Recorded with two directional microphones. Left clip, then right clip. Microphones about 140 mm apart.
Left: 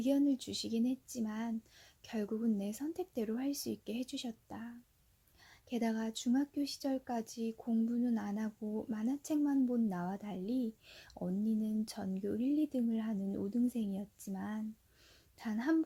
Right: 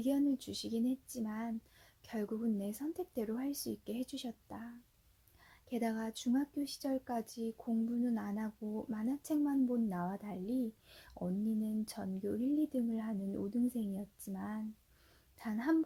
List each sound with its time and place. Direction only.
0.0 s speech: 15° left (ahead or behind)